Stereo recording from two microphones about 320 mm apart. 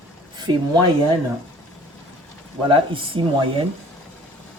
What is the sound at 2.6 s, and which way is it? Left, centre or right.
Speech, centre.